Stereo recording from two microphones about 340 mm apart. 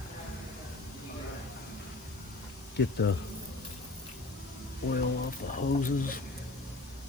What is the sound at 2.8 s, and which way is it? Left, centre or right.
Speech, left.